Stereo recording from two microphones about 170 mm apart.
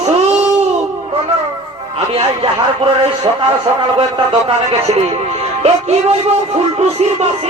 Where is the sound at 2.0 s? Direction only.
30° right (ahead or behind).